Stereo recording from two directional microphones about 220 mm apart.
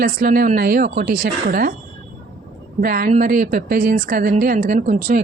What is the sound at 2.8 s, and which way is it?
A woman's voice, 40° right (ahead or behind).